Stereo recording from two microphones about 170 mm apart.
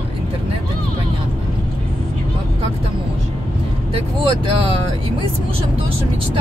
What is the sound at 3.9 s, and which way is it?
Speech, 30° right (ahead or behind).